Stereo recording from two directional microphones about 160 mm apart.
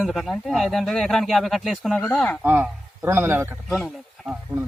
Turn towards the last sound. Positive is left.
turn(degrees=-5)  # may be behind; listen again after turning